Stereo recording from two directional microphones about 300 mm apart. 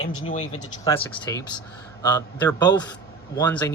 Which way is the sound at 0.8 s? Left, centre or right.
Centre.